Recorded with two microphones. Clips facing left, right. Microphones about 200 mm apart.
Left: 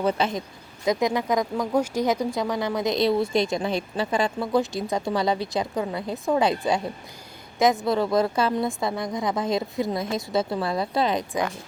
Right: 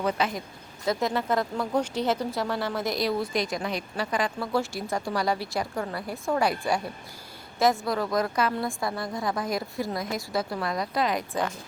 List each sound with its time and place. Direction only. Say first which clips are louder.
0.0 s speech: left 3 dB; 25° left (ahead or behind)
0.9 s speech: left 3 dB; 15° left (ahead or behind)